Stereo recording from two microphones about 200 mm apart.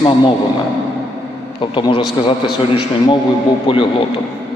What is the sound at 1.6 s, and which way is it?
Speech, 25° left (ahead or behind).